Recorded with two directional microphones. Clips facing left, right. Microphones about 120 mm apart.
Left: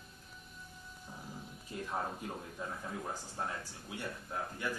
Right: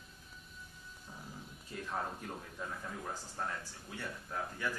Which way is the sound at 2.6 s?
20° left (ahead or behind).